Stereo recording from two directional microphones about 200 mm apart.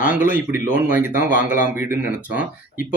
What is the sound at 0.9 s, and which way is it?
Speech, 40° left (ahead or behind).